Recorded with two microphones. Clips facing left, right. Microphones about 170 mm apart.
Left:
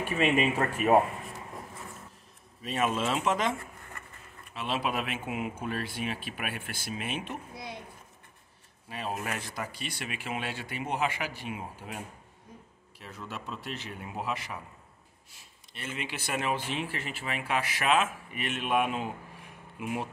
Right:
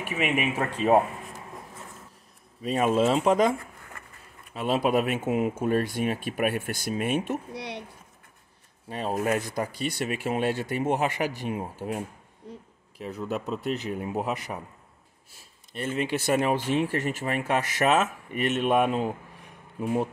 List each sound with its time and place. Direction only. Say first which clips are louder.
0.0 s speech: left 1 dB; 10° right (ahead or behind)
2.7 s speech: right 7 dB; 35° right (ahead or behind)
4.6 s speech: right 8 dB; 45° right (ahead or behind)
7.5 s speech: right 6 dB; 75° right (ahead or behind)
8.8 s speech: right 8 dB; 35° right (ahead or behind)
12.4 s a sound: right 9 dB; 75° right (ahead or behind)
13.0 s speech: right 10 dB; 40° right (ahead or behind)